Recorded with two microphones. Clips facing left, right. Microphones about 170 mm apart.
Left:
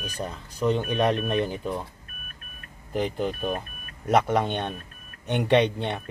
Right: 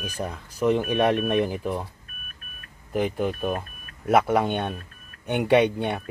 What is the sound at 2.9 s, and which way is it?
Speech, 5° right (ahead or behind).